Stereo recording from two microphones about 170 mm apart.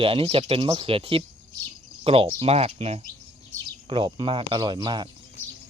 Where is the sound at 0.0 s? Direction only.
35° right (ahead or behind).